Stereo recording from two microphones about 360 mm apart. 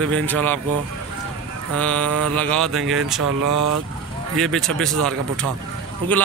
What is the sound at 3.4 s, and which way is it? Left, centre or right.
Speech, right.